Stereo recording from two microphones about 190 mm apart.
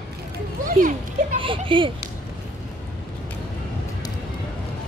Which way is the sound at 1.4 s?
25° right (ahead or behind).